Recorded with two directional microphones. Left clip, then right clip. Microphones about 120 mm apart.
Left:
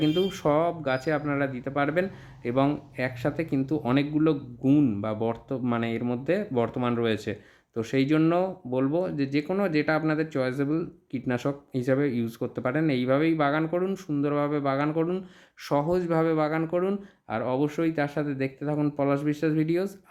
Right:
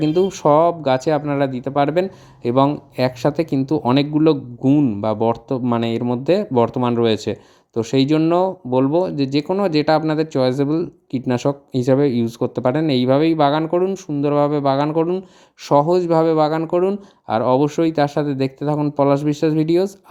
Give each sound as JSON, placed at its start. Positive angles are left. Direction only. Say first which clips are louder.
{"t": 0.0, "sound": "speech", "louder": "right 8 dB", "side_deg": -40}
{"t": 2.9, "sound": "speech", "louder": "right 10 dB", "side_deg": -65}
{"t": 4.6, "sound": "speech", "louder": "right 6 dB", "side_deg": -30}
{"t": 4.9, "sound": "speech", "louder": "right 10 dB", "side_deg": -50}
{"t": 14.9, "sound": "speech", "louder": "right 9 dB", "side_deg": -35}